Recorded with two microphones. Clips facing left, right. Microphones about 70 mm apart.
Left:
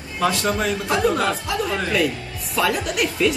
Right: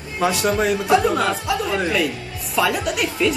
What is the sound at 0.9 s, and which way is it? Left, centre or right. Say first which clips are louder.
A woman's voice: right 1 dB; centre.